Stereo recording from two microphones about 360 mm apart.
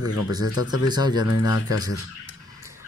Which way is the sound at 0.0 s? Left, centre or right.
Left.